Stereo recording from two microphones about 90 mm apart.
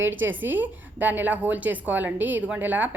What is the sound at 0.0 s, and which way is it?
A woman's voice, 20° right (ahead or behind).